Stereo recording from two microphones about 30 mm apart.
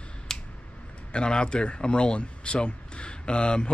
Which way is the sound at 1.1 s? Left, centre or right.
Left.